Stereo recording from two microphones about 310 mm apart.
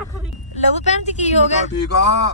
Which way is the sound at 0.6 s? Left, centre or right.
Left.